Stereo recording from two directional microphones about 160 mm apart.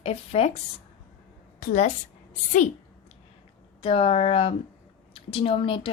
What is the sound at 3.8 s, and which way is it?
A woman's voice, 35° left (ahead or behind).